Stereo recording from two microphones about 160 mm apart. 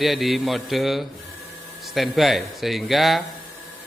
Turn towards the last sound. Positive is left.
turn(degrees=0)  # may be behind; listen again after turning